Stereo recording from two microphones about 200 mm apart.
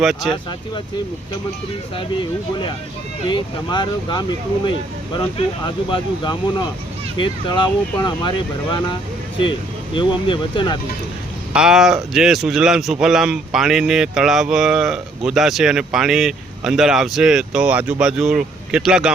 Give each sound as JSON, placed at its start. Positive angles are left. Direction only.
{"t": 0.0, "sound": "speech", "side_deg": 0}
{"t": 2.0, "sound": "speech", "side_deg": 25}
{"t": 9.9, "sound": "speech", "side_deg": 25}
{"t": 11.5, "sound": "speech", "side_deg": -5}